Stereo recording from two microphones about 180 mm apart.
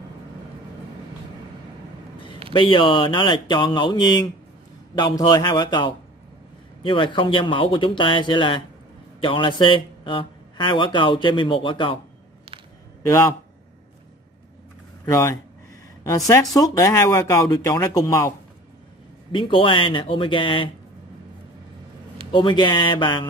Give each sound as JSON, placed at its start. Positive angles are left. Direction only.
{"t": 2.5, "sound": "speech", "side_deg": 30}
{"t": 13.0, "sound": "speech", "side_deg": 15}
{"t": 15.0, "sound": "speech", "side_deg": 15}
{"t": 19.3, "sound": "speech", "side_deg": 30}
{"t": 22.3, "sound": "speech", "side_deg": 25}